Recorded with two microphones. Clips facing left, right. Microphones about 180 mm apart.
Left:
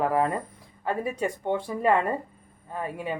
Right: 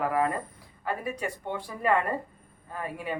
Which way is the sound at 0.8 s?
30° left (ahead or behind).